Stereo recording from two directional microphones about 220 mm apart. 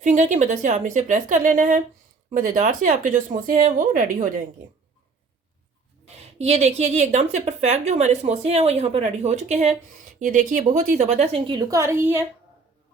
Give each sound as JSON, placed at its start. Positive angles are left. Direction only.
{"t": 0.0, "sound": "speech", "side_deg": -35}
{"t": 6.4, "sound": "a woman's voice", "side_deg": -30}